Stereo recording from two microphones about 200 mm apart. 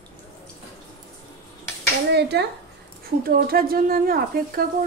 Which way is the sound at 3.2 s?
50° right (ahead or behind).